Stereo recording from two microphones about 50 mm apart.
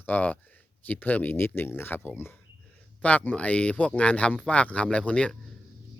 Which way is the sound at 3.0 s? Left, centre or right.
Left.